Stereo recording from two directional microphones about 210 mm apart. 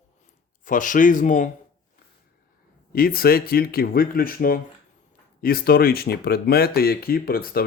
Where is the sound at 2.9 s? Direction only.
45° left (ahead or behind).